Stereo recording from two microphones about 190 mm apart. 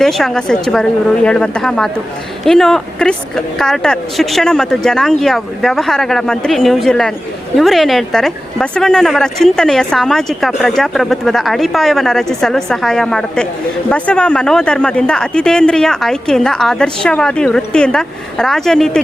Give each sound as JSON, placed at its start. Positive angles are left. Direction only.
{"t": 0.0, "sound": "a woman's voice", "side_deg": 0}